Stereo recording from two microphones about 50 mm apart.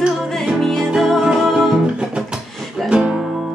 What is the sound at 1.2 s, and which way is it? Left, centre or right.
Music, centre.